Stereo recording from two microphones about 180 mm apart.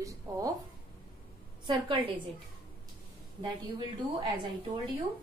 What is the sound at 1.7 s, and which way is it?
Speech, 30° right (ahead or behind).